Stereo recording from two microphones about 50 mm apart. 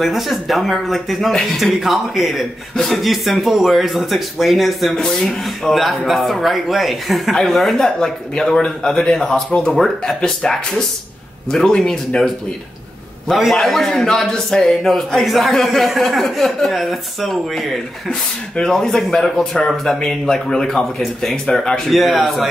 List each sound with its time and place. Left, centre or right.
0.0 s a man's voice: centre
13.4 s a man's voice: centre